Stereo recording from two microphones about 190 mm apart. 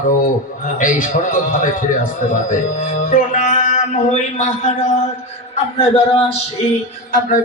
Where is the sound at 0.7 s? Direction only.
45° left (ahead or behind).